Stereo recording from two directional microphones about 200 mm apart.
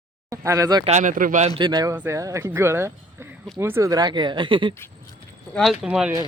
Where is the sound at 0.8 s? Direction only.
35° right (ahead or behind).